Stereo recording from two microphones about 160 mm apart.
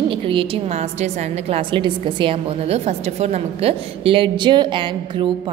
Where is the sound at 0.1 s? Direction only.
35° right (ahead or behind).